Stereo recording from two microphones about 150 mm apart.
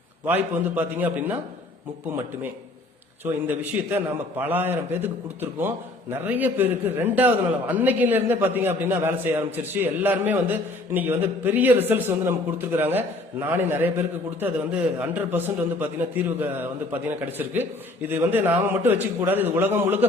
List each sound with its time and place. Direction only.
0.3 s a man's voice: 15° right (ahead or behind)
3.4 s a man's voice: 15° right (ahead or behind)